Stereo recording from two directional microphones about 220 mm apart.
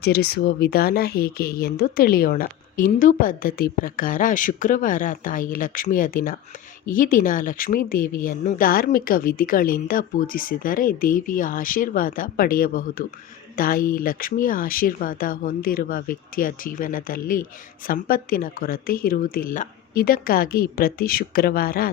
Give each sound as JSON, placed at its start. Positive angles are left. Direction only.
{"t": 0.0, "sound": "speech", "side_deg": 45}